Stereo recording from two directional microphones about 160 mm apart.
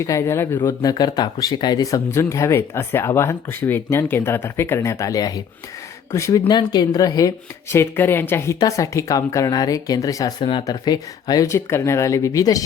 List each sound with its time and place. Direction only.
0.0 s speech: 15° left (ahead or behind)